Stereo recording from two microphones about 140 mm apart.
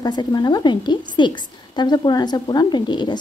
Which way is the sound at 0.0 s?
30° left (ahead or behind).